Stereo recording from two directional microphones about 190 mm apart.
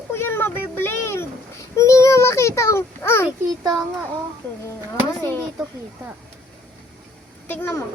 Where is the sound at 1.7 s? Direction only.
15° left (ahead or behind).